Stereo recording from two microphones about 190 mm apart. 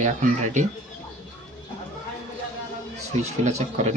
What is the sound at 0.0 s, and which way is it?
Speech, 40° right (ahead or behind).